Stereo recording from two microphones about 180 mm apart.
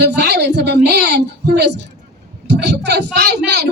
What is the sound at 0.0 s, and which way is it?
A man's voice, 65° right (ahead or behind).